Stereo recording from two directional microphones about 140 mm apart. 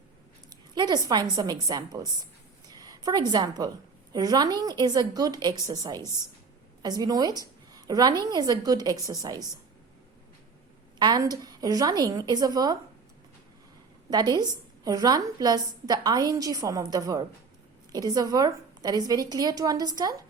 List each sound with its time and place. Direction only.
0.5 s a woman's voice: 30° right (ahead or behind)
11.0 s a woman's voice: 30° right (ahead or behind)
14.1 s a woman's voice: 30° right (ahead or behind)